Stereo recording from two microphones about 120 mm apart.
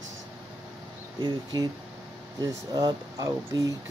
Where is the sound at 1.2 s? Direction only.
35° right (ahead or behind).